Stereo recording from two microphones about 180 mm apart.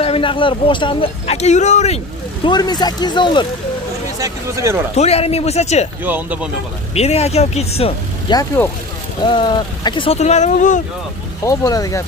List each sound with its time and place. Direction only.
0.0 s speech: 30° left (ahead or behind)
2.4 s speech: 25° left (ahead or behind)
4.2 s speech: 15° right (ahead or behind)
4.9 s speech: 35° left (ahead or behind)
6.0 s speech: 10° right (ahead or behind)
6.9 s speech: 35° left (ahead or behind)
8.3 s speech: 25° left (ahead or behind); by 10.8 s 40° left (ahead or behind)
11.4 s speech: 20° left (ahead or behind)